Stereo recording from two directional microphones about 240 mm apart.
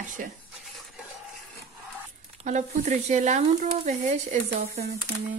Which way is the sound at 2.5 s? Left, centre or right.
Right.